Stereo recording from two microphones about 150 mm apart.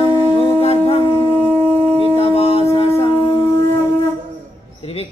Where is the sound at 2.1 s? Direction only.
40° left (ahead or behind).